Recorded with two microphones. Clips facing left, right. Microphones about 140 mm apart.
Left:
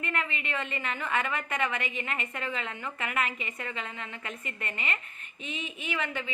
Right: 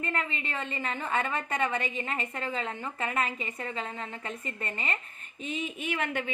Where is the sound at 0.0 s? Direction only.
35° right (ahead or behind).